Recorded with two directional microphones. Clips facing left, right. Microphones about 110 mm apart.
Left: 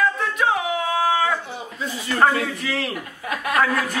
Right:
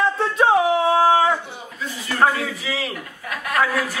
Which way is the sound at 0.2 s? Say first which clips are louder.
Right 5 dB; 30° right (ahead or behind).